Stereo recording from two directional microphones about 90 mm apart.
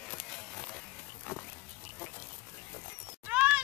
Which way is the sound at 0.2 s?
5° left (ahead or behind).